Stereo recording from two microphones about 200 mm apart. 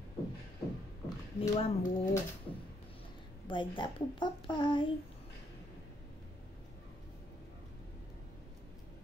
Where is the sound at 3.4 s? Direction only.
25° left (ahead or behind).